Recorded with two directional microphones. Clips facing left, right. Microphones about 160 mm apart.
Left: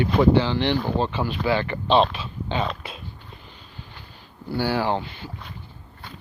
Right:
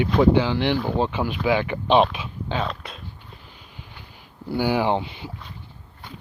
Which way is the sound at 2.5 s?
Centre (ahead or behind).